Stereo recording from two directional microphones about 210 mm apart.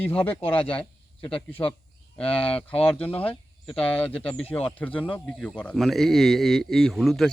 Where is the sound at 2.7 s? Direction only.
5° left (ahead or behind).